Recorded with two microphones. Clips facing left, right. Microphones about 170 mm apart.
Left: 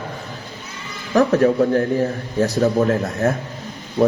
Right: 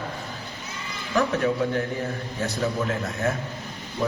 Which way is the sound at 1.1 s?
40° left (ahead or behind).